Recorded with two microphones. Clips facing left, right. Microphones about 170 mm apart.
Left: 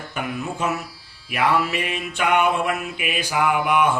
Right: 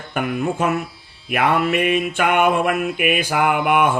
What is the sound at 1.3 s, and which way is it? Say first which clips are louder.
Mantra: right 3 dB; 55° right (ahead or behind).